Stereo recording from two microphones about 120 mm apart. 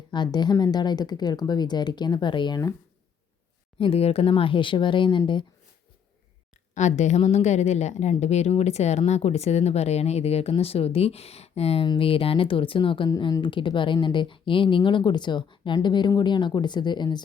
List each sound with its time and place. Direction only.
0.1 s speech: 40° left (ahead or behind)
3.8 s speech: 55° left (ahead or behind)
6.7 s a woman's voice: 75° left (ahead or behind); by 11.9 s 60° left (ahead or behind)
11.9 s speech: 50° left (ahead or behind)